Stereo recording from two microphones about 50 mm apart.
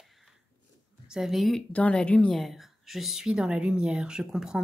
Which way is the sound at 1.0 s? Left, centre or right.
Centre.